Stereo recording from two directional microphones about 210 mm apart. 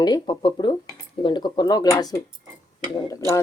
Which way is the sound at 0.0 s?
20° left (ahead or behind).